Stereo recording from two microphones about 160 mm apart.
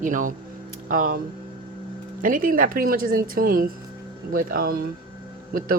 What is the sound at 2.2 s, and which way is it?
Speech, 60° right (ahead or behind).